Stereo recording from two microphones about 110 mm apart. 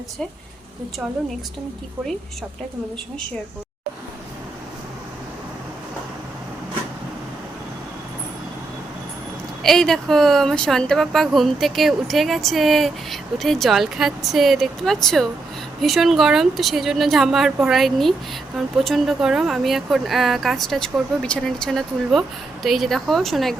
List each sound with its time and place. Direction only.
9.6 s speech: 5° left (ahead or behind)